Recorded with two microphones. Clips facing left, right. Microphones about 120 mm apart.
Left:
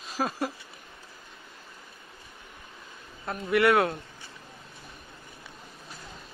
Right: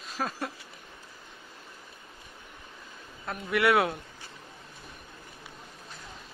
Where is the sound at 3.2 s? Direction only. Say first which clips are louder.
Left 3 dB; centre (ahead or behind).